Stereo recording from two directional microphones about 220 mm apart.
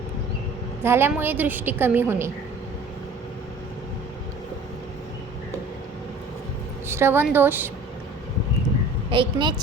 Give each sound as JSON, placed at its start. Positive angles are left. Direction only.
{"t": 0.8, "sound": "a woman's voice", "side_deg": -10}
{"t": 6.8, "sound": "a woman's voice", "side_deg": -10}
{"t": 9.0, "sound": "a woman's voice", "side_deg": -20}